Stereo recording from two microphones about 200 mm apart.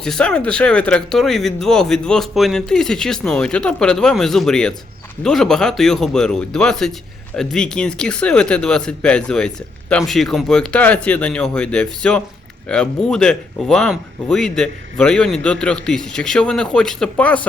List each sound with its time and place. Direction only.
0.0 s speech: 5° left (ahead or behind)